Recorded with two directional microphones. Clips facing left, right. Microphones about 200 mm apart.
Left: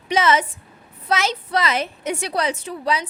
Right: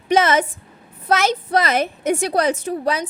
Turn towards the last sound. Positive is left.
turn(degrees=-45)  # may be behind; listen again after turning